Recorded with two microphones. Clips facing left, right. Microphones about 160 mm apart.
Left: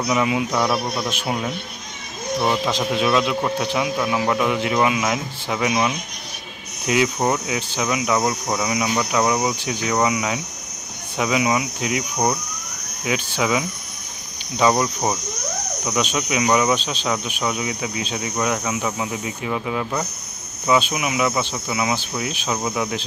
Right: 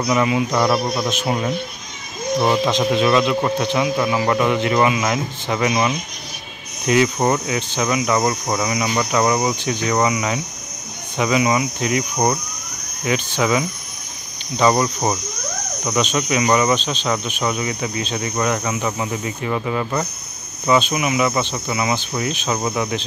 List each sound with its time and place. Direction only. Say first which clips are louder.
0.0 s speech: right 2 dB; 5° left (ahead or behind)
0.7 s a man's voice: right 3 dB; 15° right (ahead or behind)
1.2 s speech: right 3 dB; centre (ahead or behind)
2.6 s speech: right 4 dB; 5° left (ahead or behind)